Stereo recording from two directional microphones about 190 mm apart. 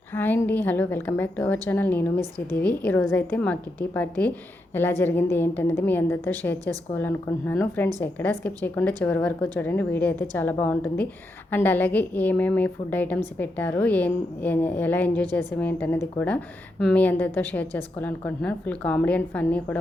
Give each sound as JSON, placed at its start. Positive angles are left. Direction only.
{"t": 0.1, "sound": "a woman's voice", "side_deg": 10}